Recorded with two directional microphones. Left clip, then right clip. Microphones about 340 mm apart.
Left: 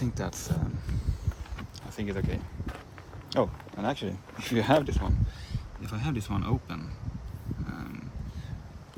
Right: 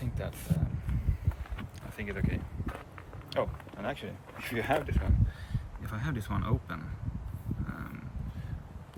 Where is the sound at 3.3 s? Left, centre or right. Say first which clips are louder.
Left 5 dB; centre.